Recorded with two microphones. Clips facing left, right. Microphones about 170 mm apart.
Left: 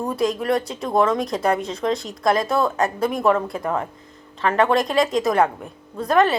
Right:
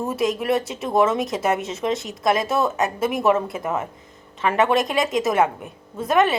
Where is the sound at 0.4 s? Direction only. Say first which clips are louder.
Even; 25° right (ahead or behind).